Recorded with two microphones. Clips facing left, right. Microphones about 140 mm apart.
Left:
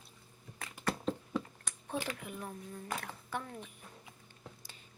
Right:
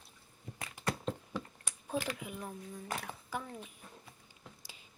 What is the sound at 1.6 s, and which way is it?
A woman's voice, 5° right (ahead or behind).